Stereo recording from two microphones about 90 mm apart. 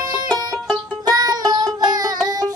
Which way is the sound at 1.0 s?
45° right (ahead or behind).